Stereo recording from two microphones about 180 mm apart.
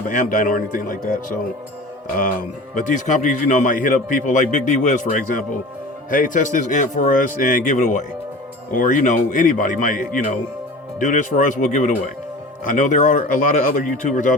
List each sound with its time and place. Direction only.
0.1 s speech: 50° left (ahead or behind)
2.1 s speech: 50° left (ahead or behind)